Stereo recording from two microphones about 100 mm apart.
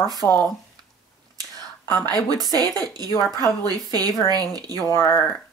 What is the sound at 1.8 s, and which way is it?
Speech, 20° left (ahead or behind).